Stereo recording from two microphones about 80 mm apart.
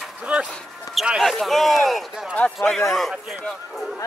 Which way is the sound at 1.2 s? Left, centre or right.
Centre.